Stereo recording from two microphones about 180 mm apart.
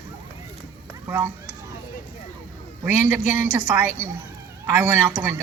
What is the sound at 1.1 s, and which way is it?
Speech, 15° right (ahead or behind).